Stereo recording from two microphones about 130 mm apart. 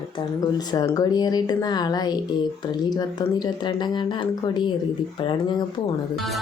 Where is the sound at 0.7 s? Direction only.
30° left (ahead or behind).